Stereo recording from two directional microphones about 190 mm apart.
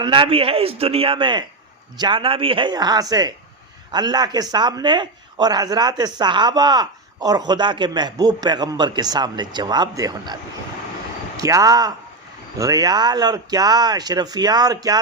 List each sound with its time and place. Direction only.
0.0 s speech: 25° right (ahead or behind)
11.3 s speech: 20° right (ahead or behind)